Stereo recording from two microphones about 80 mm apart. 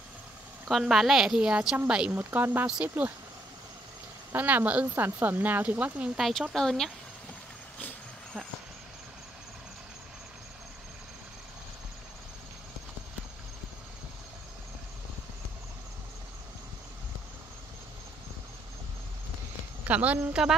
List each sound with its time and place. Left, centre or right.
0.7 s a woman's voice: centre
2.1 s speech: right
4.3 s speech: right
6.1 s a woman's voice: centre
19.9 s speech: centre